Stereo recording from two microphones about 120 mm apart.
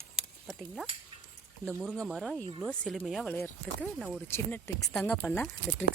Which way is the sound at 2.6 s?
5° left (ahead or behind).